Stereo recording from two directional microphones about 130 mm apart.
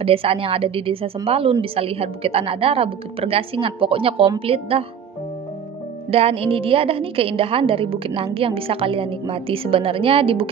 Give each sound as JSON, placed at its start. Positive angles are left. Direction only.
{"t": 0.0, "sound": "a woman's voice", "side_deg": -45}
{"t": 6.0, "sound": "a woman's voice", "side_deg": -50}